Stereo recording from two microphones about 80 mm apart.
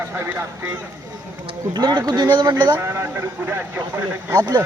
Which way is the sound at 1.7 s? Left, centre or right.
Right.